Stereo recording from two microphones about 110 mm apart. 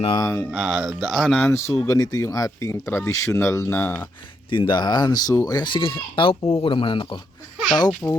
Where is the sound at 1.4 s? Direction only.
25° left (ahead or behind).